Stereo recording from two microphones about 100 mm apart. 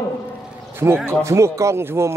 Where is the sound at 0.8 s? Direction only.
30° right (ahead or behind).